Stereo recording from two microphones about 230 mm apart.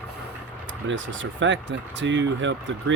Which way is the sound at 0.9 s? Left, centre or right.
Right.